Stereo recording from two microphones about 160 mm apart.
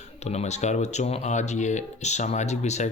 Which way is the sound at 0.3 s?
45° left (ahead or behind).